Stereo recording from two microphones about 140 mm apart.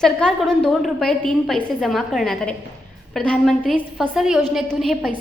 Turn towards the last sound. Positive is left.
turn(degrees=0)  # may be behind; listen again after turning